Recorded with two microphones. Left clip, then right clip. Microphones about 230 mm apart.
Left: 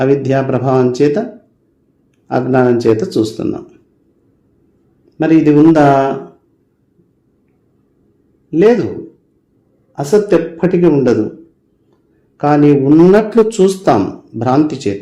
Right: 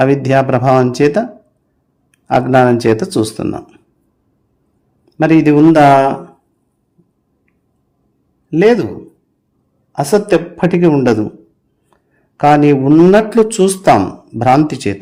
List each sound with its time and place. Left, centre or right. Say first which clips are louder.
0.0 s a man's voice: right 2 dB; right
5.0 s a man's voice: even; right
8.4 s a man's voice: even; right
9.9 s a man's voice: left 1 dB; right
12.4 s a man's voice: right 1 dB; right